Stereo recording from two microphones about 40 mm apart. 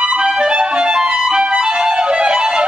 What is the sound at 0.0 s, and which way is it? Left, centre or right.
Music, right.